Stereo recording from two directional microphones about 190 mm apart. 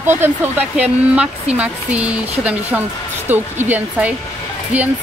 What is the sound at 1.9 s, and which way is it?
Speech, 35° right (ahead or behind).